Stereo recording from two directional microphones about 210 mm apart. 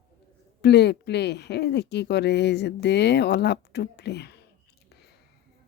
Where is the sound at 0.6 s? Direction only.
55° left (ahead or behind).